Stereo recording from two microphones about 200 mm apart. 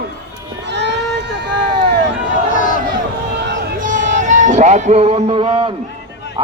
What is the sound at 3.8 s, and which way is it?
A man's voice, 40° right (ahead or behind).